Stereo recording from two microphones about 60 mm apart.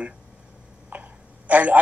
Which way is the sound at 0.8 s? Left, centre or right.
Right.